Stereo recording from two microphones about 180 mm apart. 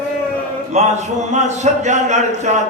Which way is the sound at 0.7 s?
40° right (ahead or behind).